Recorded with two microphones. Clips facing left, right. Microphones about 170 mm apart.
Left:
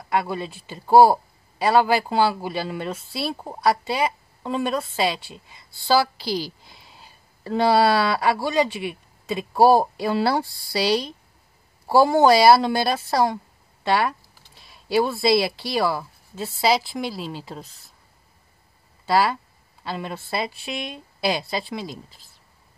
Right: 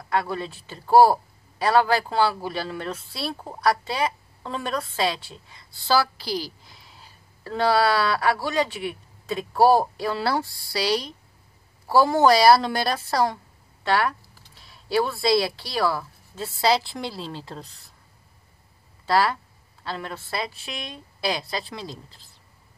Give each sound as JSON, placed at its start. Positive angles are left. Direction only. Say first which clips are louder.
{"t": 0.1, "sound": "a man's voice", "louder": "left 1 dB", "side_deg": 15}
{"t": 6.2, "sound": "a woman's voice", "louder": "left 2 dB", "side_deg": -10}
{"t": 7.0, "sound": "a man's voice", "louder": "left 3 dB", "side_deg": 15}
{"t": 19.0, "sound": "a man's voice", "louder": "left 1 dB", "side_deg": 10}
{"t": 20.2, "sound": "speech", "louder": "left 4 dB", "side_deg": 25}
{"t": 20.9, "sound": "a man's voice", "louder": "left 2 dB", "side_deg": 10}